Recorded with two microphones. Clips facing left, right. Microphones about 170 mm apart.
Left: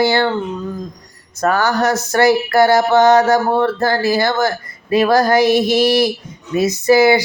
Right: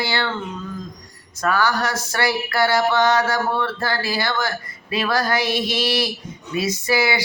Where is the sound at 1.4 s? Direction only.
45° left (ahead or behind).